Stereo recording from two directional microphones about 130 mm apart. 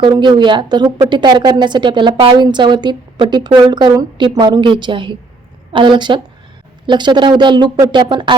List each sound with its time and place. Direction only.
0.0 s a woman's voice: 35° right (ahead or behind)